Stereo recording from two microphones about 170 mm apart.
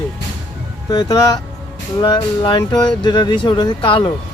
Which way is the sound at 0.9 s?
20° left (ahead or behind).